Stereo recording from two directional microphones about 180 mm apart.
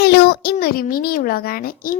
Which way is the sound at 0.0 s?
60° left (ahead or behind).